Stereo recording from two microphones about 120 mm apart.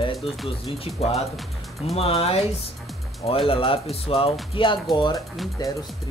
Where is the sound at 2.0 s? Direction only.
55° left (ahead or behind).